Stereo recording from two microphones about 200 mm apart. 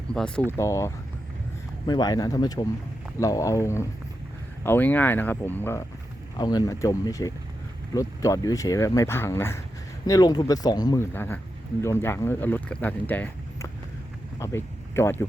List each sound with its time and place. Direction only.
0.1 s speech: 5° left (ahead or behind)
0.5 s speech: 15° left (ahead or behind)
6.3 s speech: 20° left (ahead or behind)